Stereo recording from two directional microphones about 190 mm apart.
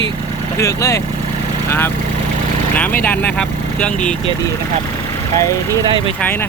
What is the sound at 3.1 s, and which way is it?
Speech, 5° left (ahead or behind).